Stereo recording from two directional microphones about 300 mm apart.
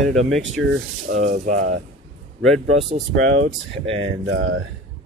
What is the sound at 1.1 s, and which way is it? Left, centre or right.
Speech, right.